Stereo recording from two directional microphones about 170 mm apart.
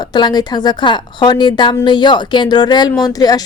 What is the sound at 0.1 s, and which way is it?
Speech, 25° left (ahead or behind).